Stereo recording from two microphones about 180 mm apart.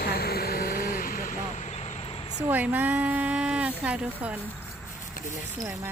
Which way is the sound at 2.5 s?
10° right (ahead or behind).